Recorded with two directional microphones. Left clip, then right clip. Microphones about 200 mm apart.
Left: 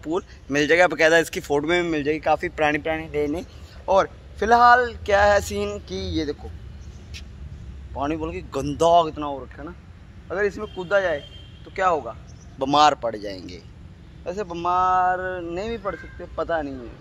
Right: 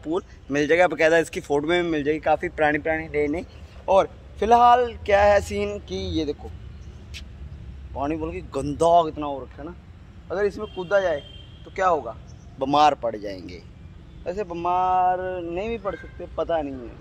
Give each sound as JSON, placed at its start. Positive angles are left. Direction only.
{"t": 0.0, "sound": "speech", "side_deg": 0}
{"t": 5.9, "sound": "speech", "side_deg": 30}
{"t": 7.9, "sound": "a man's voice", "side_deg": 5}